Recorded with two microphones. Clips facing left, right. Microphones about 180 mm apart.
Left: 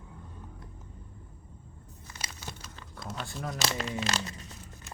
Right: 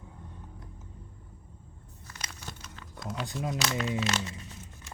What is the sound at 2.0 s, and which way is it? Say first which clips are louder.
Crumpling: left 1 dB; 15° left (ahead or behind).